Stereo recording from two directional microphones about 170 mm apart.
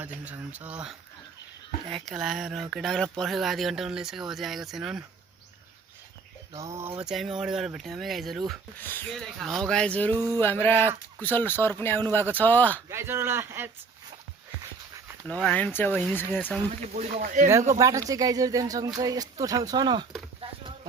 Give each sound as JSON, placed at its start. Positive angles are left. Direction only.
{"t": 0.0, "sound": "speech", "side_deg": -10}
{"t": 2.0, "sound": "speech", "side_deg": 0}
{"t": 6.5, "sound": "speech", "side_deg": -20}
{"t": 8.8, "sound": "speech", "side_deg": 10}
{"t": 10.2, "sound": "speech", "side_deg": -20}
{"t": 10.4, "sound": "speech", "side_deg": 10}
{"t": 12.9, "sound": "speech", "side_deg": -15}
{"t": 15.3, "sound": "speech", "side_deg": 5}
{"t": 16.9, "sound": "speech", "side_deg": -45}
{"t": 17.7, "sound": "speech", "side_deg": -20}